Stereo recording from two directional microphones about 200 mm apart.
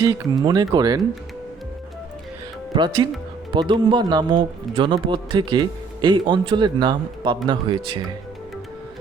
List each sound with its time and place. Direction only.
0.0 s speech: 20° right (ahead or behind)
2.7 s speech: 25° right (ahead or behind)